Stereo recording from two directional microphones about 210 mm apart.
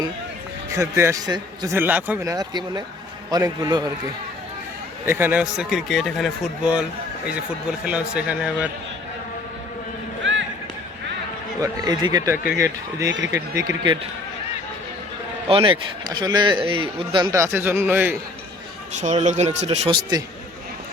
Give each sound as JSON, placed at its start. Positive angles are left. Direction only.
{"t": 0.7, "sound": "a man's voice", "side_deg": -15}
{"t": 5.0, "sound": "a man's voice", "side_deg": -10}
{"t": 10.3, "sound": "music", "side_deg": -60}
{"t": 11.6, "sound": "a man's voice", "side_deg": -20}
{"t": 13.1, "sound": "speech", "side_deg": -60}
{"t": 13.3, "sound": "a man's voice", "side_deg": -15}
{"t": 15.4, "sound": "speech", "side_deg": -25}
{"t": 18.9, "sound": "speech", "side_deg": -35}